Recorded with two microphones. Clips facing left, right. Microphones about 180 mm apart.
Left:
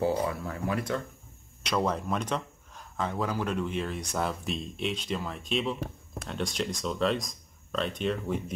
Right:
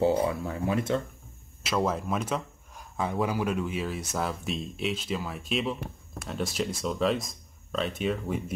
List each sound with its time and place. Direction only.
0.0 s speech: 25° right (ahead or behind)
1.6 s speech: 5° right (ahead or behind)